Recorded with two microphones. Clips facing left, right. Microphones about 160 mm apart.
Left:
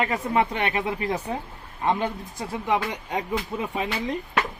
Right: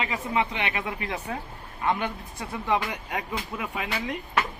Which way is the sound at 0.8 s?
35° left (ahead or behind).